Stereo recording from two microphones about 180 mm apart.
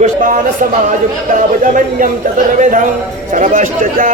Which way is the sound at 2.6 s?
45° right (ahead or behind).